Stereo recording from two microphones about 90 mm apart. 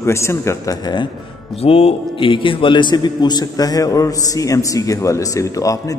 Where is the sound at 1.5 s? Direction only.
90° left.